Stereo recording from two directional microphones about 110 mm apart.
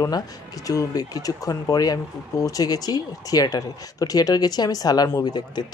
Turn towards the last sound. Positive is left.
turn(degrees=40)  # may be behind; listen again after turning